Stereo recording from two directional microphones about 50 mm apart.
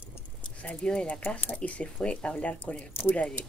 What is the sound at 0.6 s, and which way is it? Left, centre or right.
Speech, left.